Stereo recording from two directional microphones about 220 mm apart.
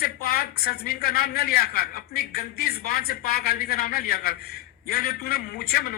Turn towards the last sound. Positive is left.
turn(degrees=45)  # may be behind; listen again after turning